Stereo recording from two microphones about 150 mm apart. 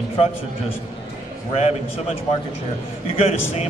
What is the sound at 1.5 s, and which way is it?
A man's voice, 45° left (ahead or behind).